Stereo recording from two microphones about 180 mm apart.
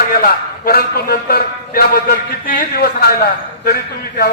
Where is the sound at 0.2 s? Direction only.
55° left (ahead or behind).